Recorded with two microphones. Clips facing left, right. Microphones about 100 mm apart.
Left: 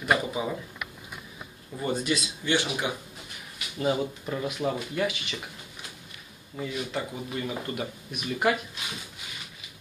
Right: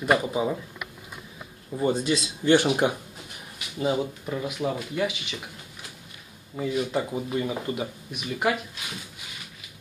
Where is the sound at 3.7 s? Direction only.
10° right (ahead or behind).